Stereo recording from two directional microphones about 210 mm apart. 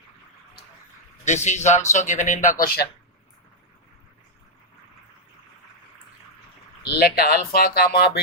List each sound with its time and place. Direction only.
1.2 s speech: 35° left (ahead or behind)
7.0 s speech: 45° left (ahead or behind)